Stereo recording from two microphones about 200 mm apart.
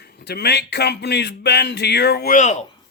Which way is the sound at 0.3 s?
55° left (ahead or behind).